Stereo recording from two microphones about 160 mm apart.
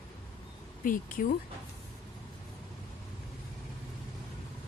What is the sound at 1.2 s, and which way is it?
Speech, 55° left (ahead or behind).